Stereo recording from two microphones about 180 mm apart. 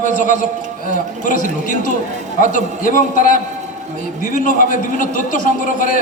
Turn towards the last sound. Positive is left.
turn(degrees=50)  # may be behind; listen again after turning